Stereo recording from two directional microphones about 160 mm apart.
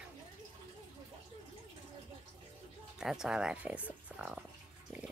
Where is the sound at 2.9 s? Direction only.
5° right (ahead or behind).